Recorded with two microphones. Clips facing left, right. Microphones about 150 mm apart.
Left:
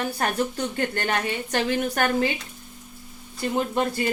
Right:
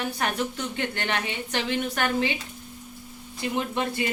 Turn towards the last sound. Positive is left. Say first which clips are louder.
# left 3 dB
turn(degrees=40)  # may be behind; listen again after turning